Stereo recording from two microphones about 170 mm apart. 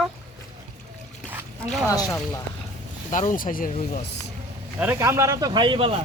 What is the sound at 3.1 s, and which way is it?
Speech, 50° left (ahead or behind).